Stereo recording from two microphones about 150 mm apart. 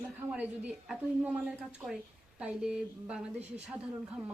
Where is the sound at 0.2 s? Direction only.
10° right (ahead or behind).